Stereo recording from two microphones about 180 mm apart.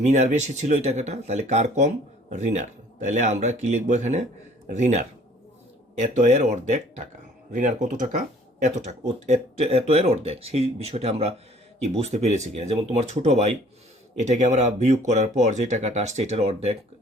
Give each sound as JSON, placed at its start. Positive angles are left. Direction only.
{"t": 0.0, "sound": "speech", "side_deg": -40}